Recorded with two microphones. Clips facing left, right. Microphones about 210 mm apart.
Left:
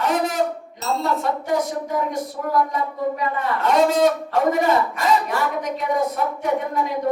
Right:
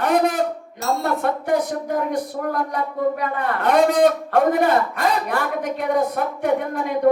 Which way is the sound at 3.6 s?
50° right (ahead or behind).